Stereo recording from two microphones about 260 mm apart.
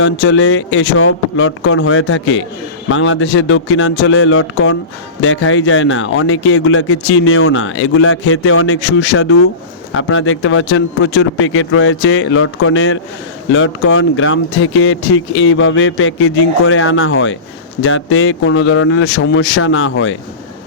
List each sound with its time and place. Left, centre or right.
0.0 s speech: left